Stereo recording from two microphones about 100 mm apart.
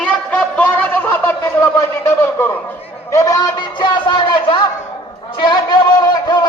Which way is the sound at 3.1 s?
35° left (ahead or behind).